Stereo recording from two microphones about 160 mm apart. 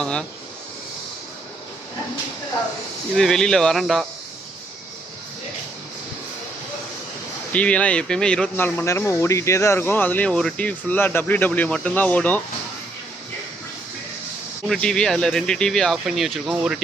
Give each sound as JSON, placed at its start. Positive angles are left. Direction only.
{"t": 0.0, "sound": "speech", "side_deg": 5}
{"t": 3.2, "sound": "speech", "side_deg": 5}
{"t": 7.5, "sound": "speech", "side_deg": 10}
{"t": 14.7, "sound": "speech", "side_deg": 5}